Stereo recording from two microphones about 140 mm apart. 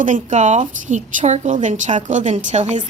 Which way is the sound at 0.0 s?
60° right (ahead or behind).